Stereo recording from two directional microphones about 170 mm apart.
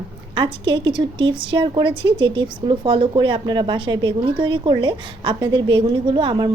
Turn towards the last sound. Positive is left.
turn(degrees=-30)  # may be behind; listen again after turning